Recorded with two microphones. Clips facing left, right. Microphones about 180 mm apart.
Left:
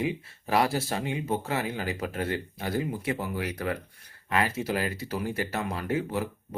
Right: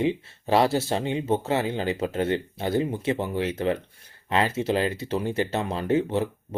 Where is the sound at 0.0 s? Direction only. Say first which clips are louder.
Right 5 dB; 25° right (ahead or behind).